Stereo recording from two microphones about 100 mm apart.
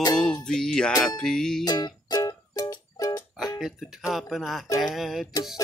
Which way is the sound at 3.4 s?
5° right (ahead or behind).